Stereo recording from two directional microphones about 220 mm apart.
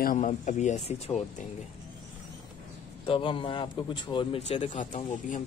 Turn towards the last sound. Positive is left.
turn(degrees=35)  # may be behind; listen again after turning